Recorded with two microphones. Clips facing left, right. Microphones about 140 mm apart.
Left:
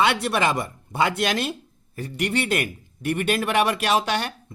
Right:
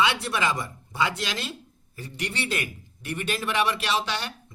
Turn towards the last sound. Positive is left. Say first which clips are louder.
# left 6 dB
turn(degrees=50)  # may be behind; listen again after turning